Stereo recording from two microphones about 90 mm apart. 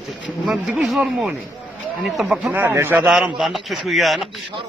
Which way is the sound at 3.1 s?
5° right (ahead or behind).